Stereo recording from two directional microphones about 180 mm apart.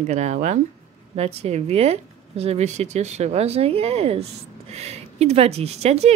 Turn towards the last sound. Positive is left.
turn(degrees=-35)  # may be behind; listen again after turning